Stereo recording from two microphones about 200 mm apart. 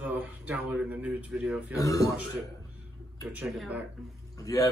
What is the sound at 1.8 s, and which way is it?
Speech, 15° left (ahead or behind).